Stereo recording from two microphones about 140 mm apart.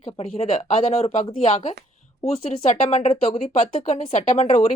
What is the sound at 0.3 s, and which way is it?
A woman's voice, 45° left (ahead or behind).